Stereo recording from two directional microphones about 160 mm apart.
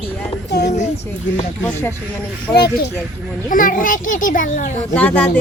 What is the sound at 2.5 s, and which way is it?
Speech, 80° left.